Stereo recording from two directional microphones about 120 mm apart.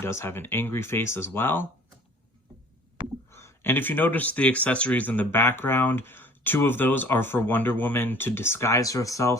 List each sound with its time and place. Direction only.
0.0 s speech: 20° left (ahead or behind)
3.3 s speech: 20° left (ahead or behind)